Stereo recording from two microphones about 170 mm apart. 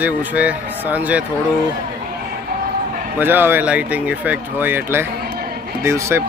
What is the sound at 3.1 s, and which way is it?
A man's voice, 10° right (ahead or behind).